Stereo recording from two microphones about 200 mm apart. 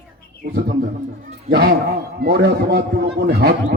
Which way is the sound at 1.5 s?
55° right (ahead or behind).